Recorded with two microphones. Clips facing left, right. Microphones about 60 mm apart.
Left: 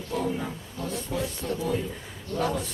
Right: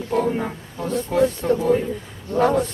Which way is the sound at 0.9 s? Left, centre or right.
Right.